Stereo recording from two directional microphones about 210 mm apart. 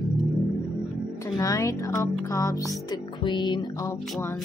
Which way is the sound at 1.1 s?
15° left (ahead or behind).